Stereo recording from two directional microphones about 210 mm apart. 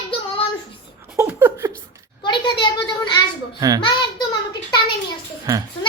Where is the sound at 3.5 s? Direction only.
20° right (ahead or behind).